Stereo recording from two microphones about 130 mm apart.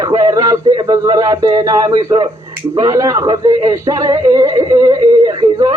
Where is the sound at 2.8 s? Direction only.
25° right (ahead or behind).